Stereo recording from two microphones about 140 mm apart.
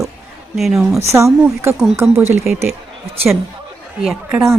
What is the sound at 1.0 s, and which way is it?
Speech, 20° right (ahead or behind).